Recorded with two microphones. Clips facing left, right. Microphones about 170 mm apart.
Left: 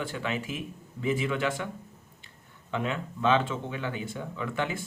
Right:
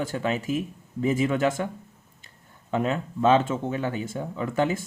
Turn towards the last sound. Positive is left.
turn(degrees=-40)  # may be behind; listen again after turning